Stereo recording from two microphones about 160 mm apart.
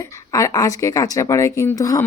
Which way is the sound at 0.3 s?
20° left (ahead or behind).